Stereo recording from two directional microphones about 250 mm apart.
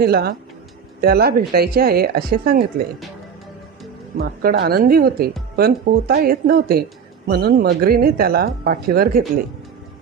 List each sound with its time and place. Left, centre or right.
0.0 s speech: right
4.2 s speech: right